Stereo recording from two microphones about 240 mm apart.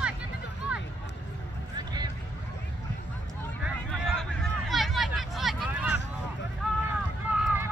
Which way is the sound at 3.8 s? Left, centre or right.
Centre.